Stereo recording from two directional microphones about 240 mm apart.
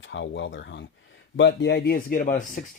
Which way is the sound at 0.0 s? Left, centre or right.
Left.